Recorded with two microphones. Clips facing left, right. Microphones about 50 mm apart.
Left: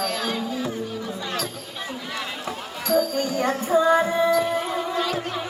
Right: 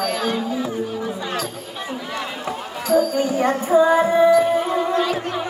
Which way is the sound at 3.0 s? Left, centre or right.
Centre.